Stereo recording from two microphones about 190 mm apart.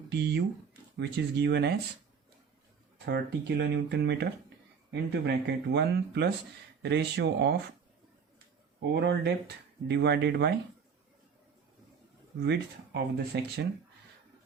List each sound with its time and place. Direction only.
0.1 s speech: 60° right (ahead or behind)
3.1 s speech: 65° right (ahead or behind)
8.8 s speech: 65° right (ahead or behind)
12.4 s speech: 60° right (ahead or behind)